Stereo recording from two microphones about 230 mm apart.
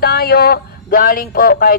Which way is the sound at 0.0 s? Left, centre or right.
Left.